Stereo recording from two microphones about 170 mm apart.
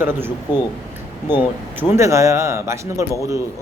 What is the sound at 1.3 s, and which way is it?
A man's voice, 15° right (ahead or behind).